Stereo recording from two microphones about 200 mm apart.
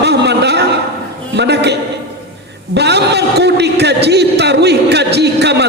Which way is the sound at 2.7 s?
55° right (ahead or behind).